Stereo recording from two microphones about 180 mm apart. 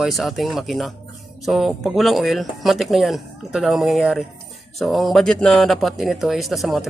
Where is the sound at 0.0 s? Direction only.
Centre (ahead or behind).